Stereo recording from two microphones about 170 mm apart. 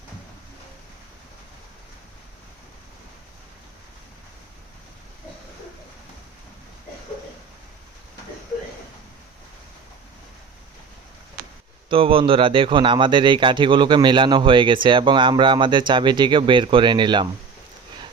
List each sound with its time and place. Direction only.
11.9 s a man's voice: 30° right (ahead or behind)